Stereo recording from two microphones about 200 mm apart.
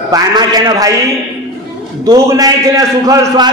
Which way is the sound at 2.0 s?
15° right (ahead or behind).